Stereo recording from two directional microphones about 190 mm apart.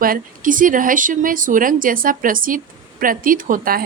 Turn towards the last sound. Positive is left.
turn(degrees=-45)  # may be behind; listen again after turning